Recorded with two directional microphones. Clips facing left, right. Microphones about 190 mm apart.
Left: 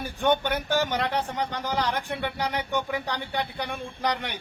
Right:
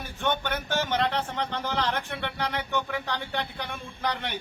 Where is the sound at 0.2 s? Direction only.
15° left (ahead or behind).